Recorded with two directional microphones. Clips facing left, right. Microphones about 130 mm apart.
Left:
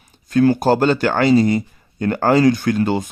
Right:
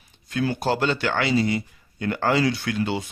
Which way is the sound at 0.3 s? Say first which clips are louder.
Left 10 dB; 45° left (ahead or behind).